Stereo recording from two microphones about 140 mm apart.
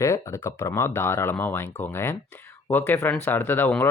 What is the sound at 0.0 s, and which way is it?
Speech, 20° left (ahead or behind).